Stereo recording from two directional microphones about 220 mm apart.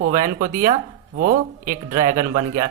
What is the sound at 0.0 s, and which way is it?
Speech, 35° right (ahead or behind).